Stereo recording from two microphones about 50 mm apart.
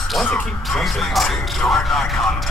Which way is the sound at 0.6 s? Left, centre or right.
Centre.